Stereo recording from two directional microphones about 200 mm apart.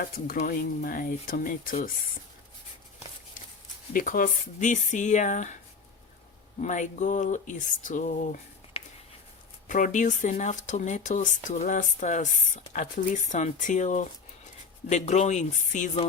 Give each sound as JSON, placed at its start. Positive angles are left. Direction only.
{"t": 0.0, "sound": "speech", "side_deg": 45}
{"t": 3.9, "sound": "speech", "side_deg": 45}
{"t": 6.6, "sound": "speech", "side_deg": 40}